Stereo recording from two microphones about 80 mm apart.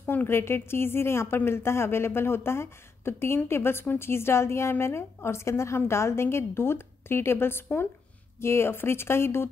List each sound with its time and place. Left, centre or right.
0.0 s a woman's voice: left